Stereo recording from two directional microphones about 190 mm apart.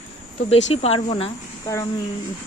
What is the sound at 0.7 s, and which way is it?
Speech, 30° left (ahead or behind).